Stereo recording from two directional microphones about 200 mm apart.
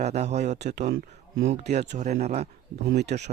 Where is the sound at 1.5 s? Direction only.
35° right (ahead or behind).